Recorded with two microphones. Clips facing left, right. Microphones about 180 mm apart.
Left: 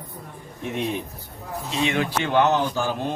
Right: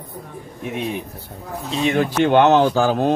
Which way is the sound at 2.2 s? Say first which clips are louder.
Right 8 dB; 65° right (ahead or behind).